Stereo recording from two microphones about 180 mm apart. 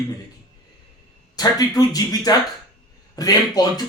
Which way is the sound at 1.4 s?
20° left (ahead or behind).